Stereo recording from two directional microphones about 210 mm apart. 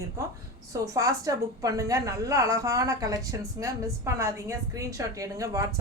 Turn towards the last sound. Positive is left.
turn(degrees=-15)  # may be behind; listen again after turning